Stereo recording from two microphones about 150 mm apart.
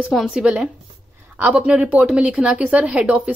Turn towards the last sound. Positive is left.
turn(degrees=-10)  # may be behind; listen again after turning